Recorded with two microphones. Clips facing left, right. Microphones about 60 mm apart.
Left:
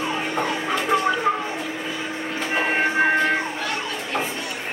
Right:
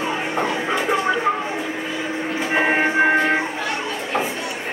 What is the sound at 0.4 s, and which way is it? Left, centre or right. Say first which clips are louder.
Music: right 3 dB; centre.